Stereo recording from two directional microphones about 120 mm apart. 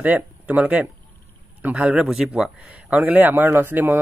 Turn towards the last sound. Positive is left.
turn(degrees=-15)  # may be behind; listen again after turning